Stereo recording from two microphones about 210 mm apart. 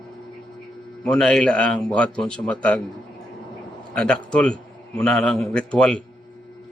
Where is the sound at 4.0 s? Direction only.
5° left (ahead or behind).